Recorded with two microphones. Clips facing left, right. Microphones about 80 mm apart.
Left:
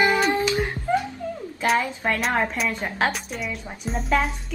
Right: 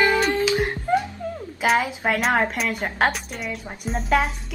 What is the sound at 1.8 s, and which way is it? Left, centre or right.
Speech, centre.